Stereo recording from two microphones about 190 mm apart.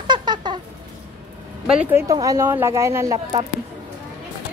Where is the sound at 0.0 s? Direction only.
25° right (ahead or behind).